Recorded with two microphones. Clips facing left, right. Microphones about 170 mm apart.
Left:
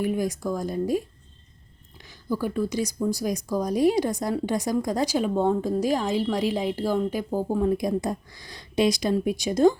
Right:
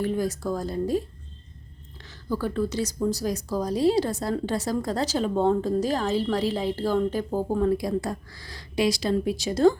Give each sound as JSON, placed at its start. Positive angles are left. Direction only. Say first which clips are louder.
{"t": 0.0, "sound": "speech", "louder": "left 1 dB", "side_deg": 15}
{"t": 2.0, "sound": "speech", "louder": "left 1 dB", "side_deg": 15}